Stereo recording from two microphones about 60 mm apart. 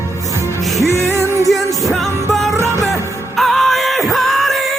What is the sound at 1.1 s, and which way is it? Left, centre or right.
Music, left.